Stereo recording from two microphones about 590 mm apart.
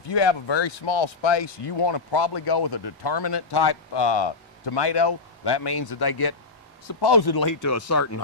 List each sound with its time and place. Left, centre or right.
0.1 s speech: left